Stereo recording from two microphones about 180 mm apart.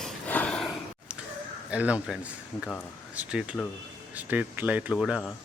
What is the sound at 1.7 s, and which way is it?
Speech, 5° right (ahead or behind).